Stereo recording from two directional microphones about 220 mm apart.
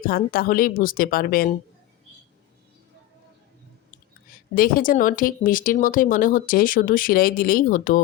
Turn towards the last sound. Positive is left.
turn(degrees=40)  # may be behind; listen again after turning